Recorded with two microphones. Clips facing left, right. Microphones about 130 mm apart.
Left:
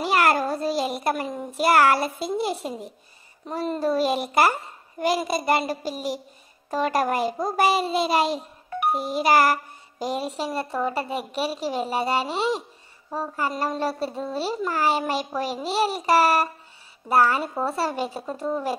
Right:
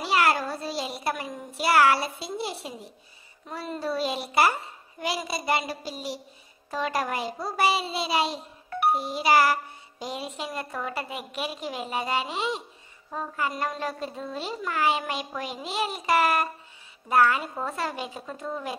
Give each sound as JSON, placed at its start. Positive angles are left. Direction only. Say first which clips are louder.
{"t": 0.0, "sound": "a child's voice", "louder": "left 3 dB", "side_deg": 50}
{"t": 8.9, "sound": "music", "louder": "left 3 dB", "side_deg": 45}